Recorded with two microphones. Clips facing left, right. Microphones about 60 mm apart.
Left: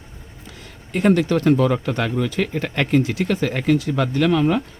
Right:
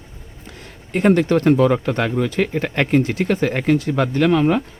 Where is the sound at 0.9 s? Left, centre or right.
Right.